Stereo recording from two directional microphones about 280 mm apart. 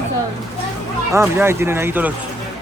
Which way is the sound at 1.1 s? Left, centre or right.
Centre.